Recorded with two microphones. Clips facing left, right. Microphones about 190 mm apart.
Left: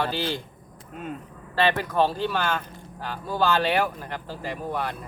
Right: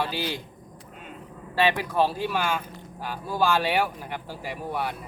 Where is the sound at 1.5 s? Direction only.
10° right (ahead or behind).